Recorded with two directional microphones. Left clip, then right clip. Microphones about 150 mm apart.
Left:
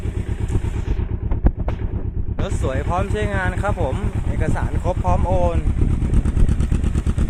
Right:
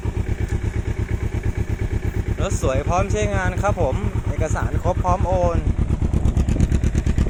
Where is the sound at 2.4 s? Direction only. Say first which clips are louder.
Right 2 dB; centre (ahead or behind); by 5.6 s 20° left (ahead or behind).